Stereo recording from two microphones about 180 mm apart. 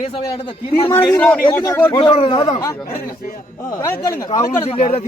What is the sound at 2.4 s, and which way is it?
A man's voice, 20° left (ahead or behind).